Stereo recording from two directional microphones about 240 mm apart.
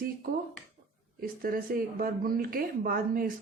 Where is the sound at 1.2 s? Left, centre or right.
Right.